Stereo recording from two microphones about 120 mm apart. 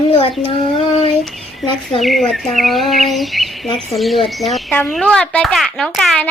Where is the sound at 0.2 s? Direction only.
55° left (ahead or behind).